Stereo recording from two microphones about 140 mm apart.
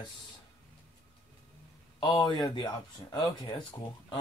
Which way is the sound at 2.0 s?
30° left (ahead or behind).